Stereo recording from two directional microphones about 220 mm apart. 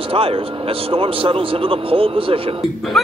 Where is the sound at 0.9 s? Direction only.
25° right (ahead or behind).